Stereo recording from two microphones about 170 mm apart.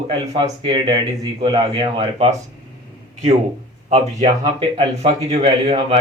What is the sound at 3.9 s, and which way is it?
Speech, 30° right (ahead or behind).